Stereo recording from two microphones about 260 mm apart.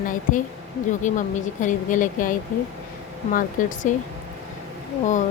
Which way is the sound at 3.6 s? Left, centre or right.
Left.